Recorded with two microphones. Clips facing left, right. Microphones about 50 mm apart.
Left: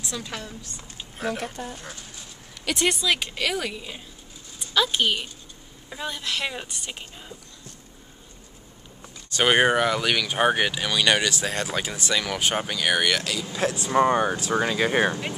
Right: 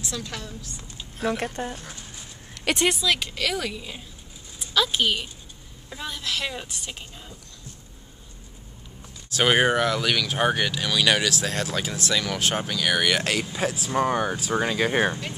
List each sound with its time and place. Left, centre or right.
0.0 s a woman's voice: centre
1.2 s speech: right
2.9 s speech: centre
9.3 s speech: centre
13.2 s speech: right
13.5 s speech: centre
13.8 s speech: centre